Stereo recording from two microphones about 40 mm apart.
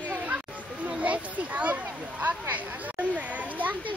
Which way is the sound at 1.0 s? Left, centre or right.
Right.